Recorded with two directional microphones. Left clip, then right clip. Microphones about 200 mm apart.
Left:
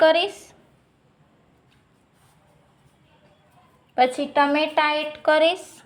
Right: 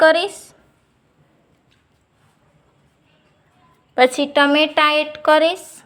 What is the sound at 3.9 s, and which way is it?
A woman's voice, 20° right (ahead or behind).